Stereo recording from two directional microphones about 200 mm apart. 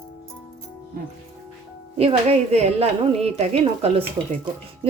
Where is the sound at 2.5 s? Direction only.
30° right (ahead or behind).